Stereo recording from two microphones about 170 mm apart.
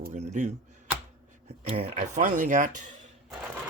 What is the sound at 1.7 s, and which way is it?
Speech, 40° right (ahead or behind).